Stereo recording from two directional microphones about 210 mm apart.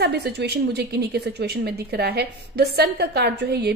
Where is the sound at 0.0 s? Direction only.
50° right (ahead or behind).